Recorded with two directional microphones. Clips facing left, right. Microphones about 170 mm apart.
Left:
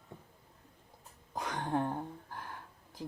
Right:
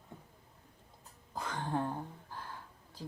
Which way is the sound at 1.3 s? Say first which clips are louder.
Left 2 dB; 20° left (ahead or behind).